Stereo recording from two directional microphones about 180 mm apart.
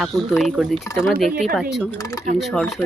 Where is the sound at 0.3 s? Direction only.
5° right (ahead or behind).